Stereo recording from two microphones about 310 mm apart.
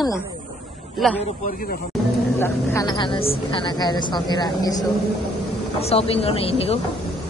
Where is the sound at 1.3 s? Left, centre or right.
Left.